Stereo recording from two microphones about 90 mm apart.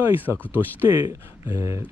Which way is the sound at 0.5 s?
25° right (ahead or behind).